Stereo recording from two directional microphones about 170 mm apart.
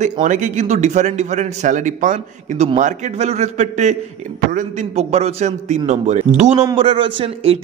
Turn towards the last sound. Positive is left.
turn(degrees=-35)  # may be behind; listen again after turning